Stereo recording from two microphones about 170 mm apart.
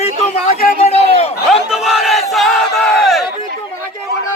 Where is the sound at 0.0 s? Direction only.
45° left (ahead or behind).